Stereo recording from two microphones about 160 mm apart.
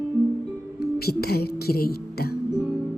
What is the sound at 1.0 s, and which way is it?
Speech, 75° left (ahead or behind).